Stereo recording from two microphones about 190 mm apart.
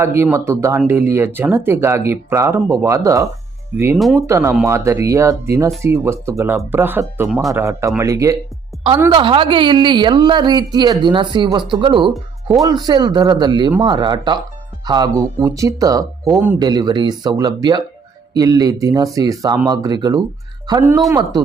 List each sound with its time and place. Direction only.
0.0 s speech: 15° right (ahead or behind)
3.9 s speech: centre (ahead or behind)
4.3 s a woman's voice: 15° right (ahead or behind)